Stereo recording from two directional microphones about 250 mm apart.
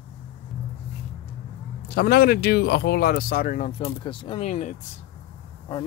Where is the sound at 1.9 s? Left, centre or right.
Left.